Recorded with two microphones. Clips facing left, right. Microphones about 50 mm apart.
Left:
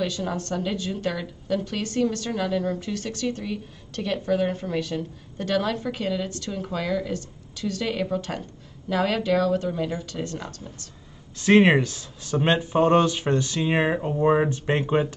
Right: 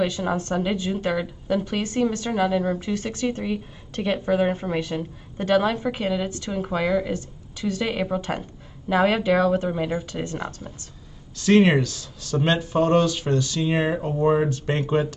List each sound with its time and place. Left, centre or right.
0.0 s a woman's voice: right
11.3 s speech: left